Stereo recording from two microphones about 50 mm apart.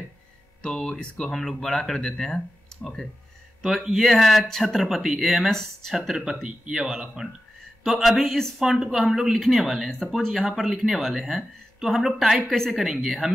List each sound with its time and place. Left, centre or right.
0.6 s speech: centre
3.6 s speech: centre
4.7 s speech: centre
6.6 s speech: centre
6.9 s speech: centre
9.8 s speech: centre